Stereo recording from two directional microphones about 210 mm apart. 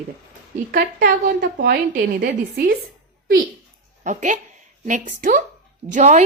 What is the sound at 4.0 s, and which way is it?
Speech, 35° right (ahead or behind).